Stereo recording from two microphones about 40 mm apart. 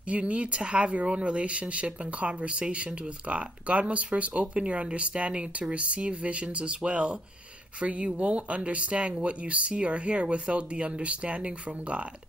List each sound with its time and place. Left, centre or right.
0.1 s speech: right